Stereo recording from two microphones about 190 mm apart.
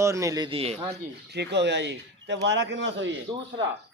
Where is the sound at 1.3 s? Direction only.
65° right (ahead or behind).